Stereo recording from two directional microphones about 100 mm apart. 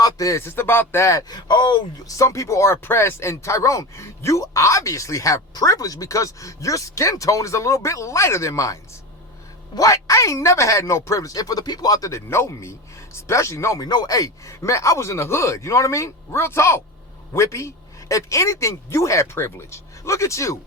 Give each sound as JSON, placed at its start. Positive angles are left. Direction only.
{"t": 0.0, "sound": "a man's voice", "side_deg": 35}
{"t": 1.3, "sound": "speech", "side_deg": 45}
{"t": 2.0, "sound": "a man's voice", "side_deg": 35}